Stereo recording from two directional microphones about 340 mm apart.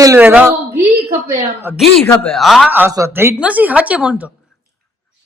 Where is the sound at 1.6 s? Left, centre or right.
Centre.